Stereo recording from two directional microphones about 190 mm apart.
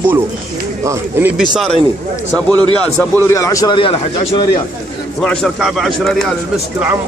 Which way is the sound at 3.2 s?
15° left (ahead or behind).